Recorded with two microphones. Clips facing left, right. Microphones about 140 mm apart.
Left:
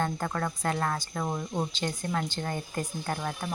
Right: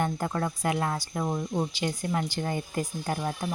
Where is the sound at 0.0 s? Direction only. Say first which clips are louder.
Right 2 dB; 15° right (ahead or behind).